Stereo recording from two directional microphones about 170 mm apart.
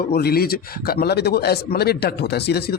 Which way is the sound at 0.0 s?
65° left (ahead or behind).